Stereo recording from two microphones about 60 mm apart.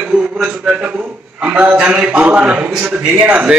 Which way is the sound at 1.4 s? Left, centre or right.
Right.